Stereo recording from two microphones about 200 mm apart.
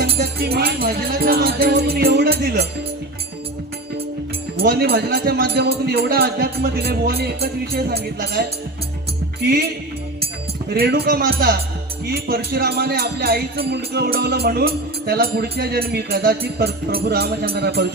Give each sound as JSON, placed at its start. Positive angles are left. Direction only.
{"t": 0.0, "sound": "speech", "side_deg": -50}
{"t": 4.5, "sound": "speech", "side_deg": -50}
{"t": 9.4, "sound": "speech", "side_deg": -50}
{"t": 10.7, "sound": "speech", "side_deg": -55}